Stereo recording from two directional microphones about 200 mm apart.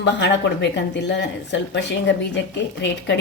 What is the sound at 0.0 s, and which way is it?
Speech, 60° left (ahead or behind).